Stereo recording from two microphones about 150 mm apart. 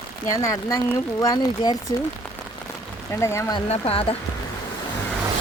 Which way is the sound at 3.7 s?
40° left (ahead or behind).